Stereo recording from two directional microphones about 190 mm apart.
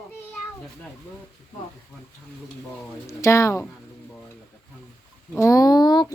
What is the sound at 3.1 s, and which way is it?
Speech, 15° left (ahead or behind).